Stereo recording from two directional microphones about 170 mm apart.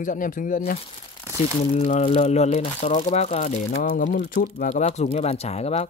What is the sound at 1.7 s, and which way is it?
Speech, 40° left (ahead or behind).